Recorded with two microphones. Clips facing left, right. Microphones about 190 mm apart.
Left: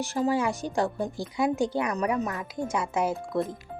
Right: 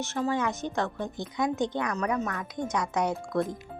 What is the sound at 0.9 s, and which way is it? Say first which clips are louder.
Speech: left 3 dB; 35° left (ahead or behind).